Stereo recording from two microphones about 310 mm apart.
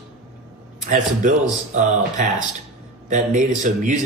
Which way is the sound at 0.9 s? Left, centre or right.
Right.